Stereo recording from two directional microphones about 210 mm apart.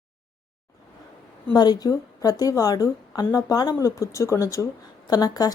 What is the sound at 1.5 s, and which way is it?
A woman's voice, 20° left (ahead or behind).